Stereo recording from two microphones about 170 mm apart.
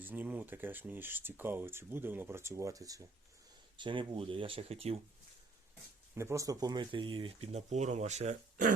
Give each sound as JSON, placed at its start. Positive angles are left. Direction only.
{"t": 0.0, "sound": "speech", "side_deg": -10}
{"t": 6.1, "sound": "speech", "side_deg": -15}